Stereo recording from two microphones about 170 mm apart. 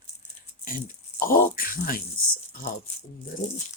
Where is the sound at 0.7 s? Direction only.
55° left (ahead or behind).